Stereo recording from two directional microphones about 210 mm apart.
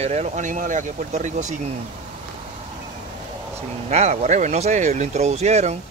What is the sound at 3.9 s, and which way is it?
Speech, 30° right (ahead or behind).